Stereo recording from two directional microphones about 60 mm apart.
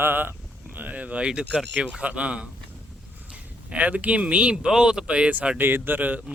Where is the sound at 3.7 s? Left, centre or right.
Right.